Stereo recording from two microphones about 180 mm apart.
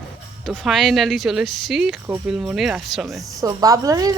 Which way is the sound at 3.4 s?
20° right (ahead or behind).